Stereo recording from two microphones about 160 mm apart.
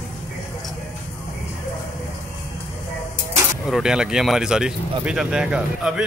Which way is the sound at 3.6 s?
5° right (ahead or behind).